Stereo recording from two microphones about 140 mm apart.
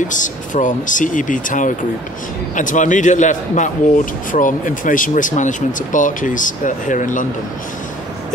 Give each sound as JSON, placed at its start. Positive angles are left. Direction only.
{"t": 0.1, "sound": "a man's voice", "side_deg": 65}